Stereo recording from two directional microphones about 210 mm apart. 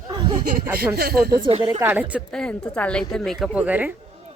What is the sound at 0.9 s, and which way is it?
Speech, 45° right (ahead or behind).